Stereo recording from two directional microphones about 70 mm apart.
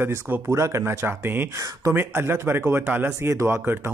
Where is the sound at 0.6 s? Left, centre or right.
Right.